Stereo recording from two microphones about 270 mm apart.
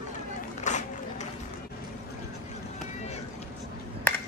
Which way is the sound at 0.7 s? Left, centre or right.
Left.